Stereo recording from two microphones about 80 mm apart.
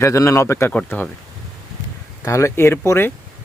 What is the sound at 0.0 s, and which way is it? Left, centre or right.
Speech, left.